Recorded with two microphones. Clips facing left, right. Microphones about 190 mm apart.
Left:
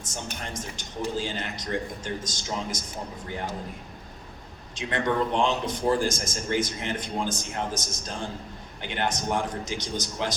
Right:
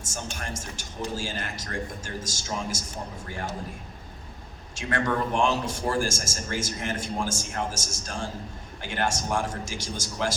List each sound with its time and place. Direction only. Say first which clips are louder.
0.1 s a man's voice: even; 20° left (ahead or behind)
4.7 s a man's voice: even; 20° left (ahead or behind)